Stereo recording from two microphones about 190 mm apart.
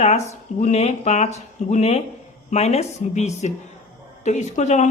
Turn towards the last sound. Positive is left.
turn(degrees=40)  # may be behind; listen again after turning